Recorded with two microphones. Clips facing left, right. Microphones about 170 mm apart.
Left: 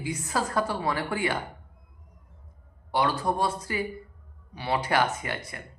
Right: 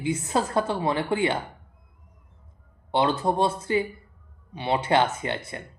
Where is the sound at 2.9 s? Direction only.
25° right (ahead or behind).